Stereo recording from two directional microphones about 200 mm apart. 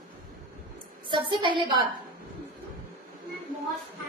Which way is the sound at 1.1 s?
25° right (ahead or behind).